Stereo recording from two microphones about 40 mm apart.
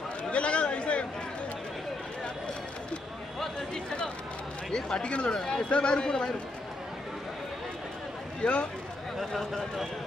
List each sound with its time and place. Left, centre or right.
0.2 s chatter: left
3.7 s a sound: centre
4.6 s a man's voice: centre
8.4 s a man's voice: left
9.2 s speech: centre